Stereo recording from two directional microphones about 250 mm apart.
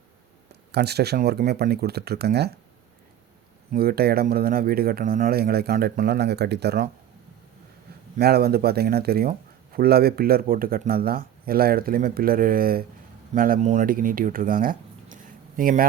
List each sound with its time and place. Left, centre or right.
0.7 s speech: right
3.7 s speech: right
8.1 s speech: right